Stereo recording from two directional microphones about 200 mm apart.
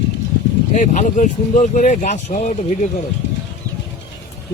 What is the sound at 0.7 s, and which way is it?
Speech, 35° left (ahead or behind).